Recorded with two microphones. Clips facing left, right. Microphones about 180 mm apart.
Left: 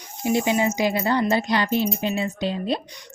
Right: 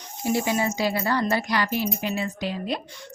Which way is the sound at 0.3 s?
20° left (ahead or behind).